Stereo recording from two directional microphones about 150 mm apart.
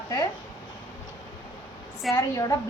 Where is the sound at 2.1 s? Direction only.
20° left (ahead or behind).